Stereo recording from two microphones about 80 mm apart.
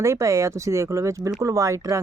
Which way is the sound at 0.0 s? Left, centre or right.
Right.